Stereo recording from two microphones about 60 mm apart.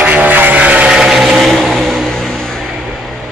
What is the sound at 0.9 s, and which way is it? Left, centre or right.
Vehicle, centre.